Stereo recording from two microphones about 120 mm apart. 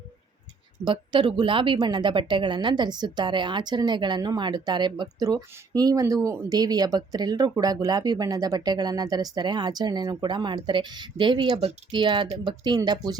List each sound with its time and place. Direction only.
0.9 s a woman's voice: 40° right (ahead or behind); by 6.5 s 20° right (ahead or behind)
6.5 s a woman's voice: 35° right (ahead or behind)